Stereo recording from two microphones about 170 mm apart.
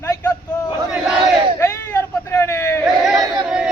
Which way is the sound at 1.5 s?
15° left (ahead or behind).